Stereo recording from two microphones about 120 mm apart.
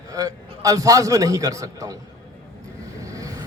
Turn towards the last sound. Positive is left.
turn(degrees=-30)  # may be behind; listen again after turning